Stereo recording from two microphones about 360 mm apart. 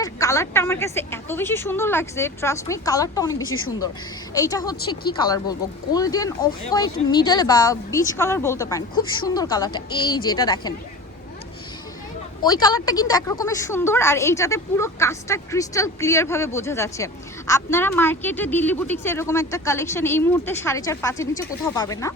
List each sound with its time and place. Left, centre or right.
0.0 s a woman's voice: centre
3.4 s speech: left
4.4 s a woman's voice: centre
12.4 s a woman's voice: centre